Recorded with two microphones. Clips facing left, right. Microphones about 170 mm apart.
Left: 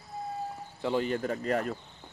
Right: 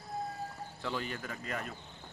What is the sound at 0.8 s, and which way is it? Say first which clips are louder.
Speech: left 10 dB; 25° left (ahead or behind).